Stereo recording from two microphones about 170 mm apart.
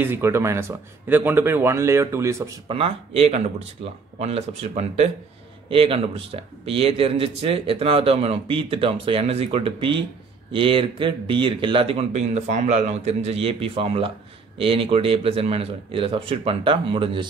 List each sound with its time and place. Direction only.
0.0 s speech: 15° right (ahead or behind)
2.7 s speech: 35° right (ahead or behind)